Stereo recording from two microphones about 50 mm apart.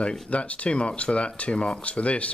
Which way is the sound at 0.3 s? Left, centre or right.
Left.